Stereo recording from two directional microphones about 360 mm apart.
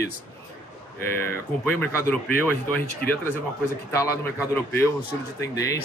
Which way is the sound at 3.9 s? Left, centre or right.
Centre.